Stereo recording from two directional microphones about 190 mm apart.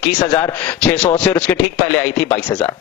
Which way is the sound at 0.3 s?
10° left (ahead or behind).